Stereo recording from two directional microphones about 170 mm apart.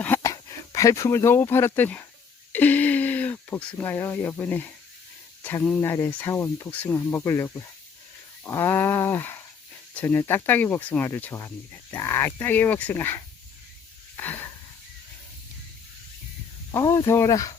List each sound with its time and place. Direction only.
0.0 s speech: 15° left (ahead or behind)
14.2 s wheeze: 10° left (ahead or behind)
16.7 s speech: 20° left (ahead or behind)